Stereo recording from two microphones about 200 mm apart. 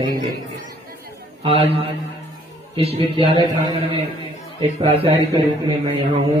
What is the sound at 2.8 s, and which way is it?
Speech, 30° right (ahead or behind).